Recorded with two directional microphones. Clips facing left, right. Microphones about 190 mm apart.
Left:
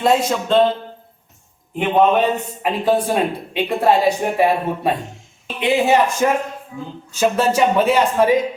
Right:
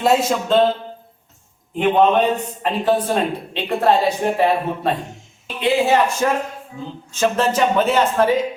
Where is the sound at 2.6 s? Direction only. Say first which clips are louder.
Left 2 dB; 10° left (ahead or behind).